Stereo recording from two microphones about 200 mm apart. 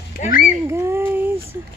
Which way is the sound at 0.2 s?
45° left (ahead or behind).